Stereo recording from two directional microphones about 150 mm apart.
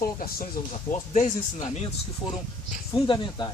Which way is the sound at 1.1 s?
55° left (ahead or behind).